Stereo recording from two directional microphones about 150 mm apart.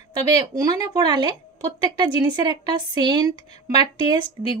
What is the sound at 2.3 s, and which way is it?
Speech, 30° right (ahead or behind).